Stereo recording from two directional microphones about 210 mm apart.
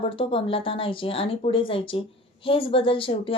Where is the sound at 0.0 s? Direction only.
25° left (ahead or behind).